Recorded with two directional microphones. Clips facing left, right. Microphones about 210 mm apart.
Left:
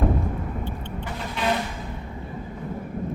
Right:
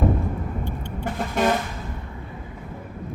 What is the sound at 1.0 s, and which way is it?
Vehicle, 45° right (ahead or behind).